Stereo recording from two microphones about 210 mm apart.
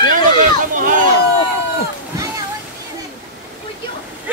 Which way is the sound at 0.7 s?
40° right (ahead or behind).